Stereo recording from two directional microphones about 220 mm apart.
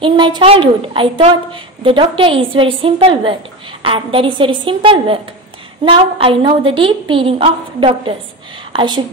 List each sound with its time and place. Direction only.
0.0 s a woman's voice: 20° right (ahead or behind)